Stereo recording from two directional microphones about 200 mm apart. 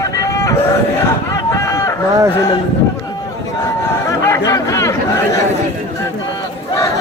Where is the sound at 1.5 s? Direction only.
15° left (ahead or behind).